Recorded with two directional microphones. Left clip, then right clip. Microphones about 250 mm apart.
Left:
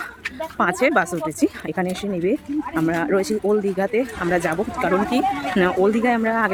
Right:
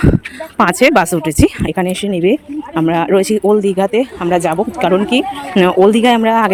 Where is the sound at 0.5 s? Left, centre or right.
Right.